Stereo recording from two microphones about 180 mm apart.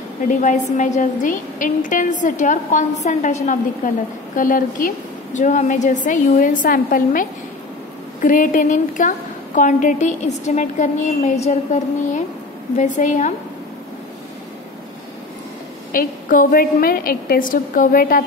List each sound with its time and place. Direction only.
0.4 s a woman's voice: 45° left (ahead or behind)
4.4 s a woman's voice: 50° left (ahead or behind)
15.9 s a woman's voice: 50° left (ahead or behind)